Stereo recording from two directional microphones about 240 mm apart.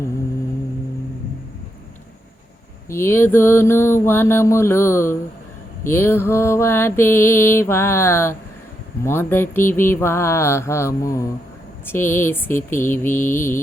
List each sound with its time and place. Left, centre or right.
2.9 s mantra: centre